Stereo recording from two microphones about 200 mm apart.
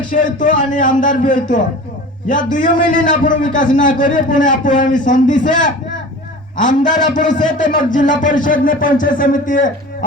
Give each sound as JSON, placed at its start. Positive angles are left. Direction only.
{"t": 0.1, "sound": "speech", "side_deg": 40}